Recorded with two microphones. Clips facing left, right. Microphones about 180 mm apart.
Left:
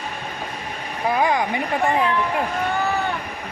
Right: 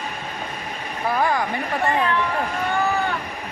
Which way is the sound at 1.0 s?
15° left (ahead or behind).